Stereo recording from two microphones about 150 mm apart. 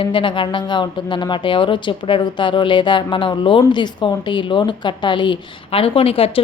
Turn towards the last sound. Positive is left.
turn(degrees=40)  # may be behind; listen again after turning